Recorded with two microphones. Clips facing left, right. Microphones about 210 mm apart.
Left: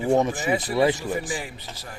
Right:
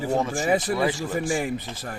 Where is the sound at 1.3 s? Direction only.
50° right (ahead or behind).